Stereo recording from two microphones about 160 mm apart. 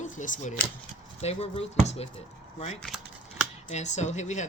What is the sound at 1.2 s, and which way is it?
Speech, 40° left (ahead or behind).